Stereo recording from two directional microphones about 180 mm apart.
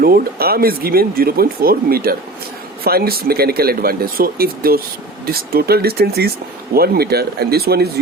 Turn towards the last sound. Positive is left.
turn(degrees=-60)  # may be behind; listen again after turning